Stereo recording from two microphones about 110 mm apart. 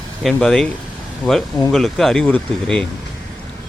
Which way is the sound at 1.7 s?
5° left (ahead or behind).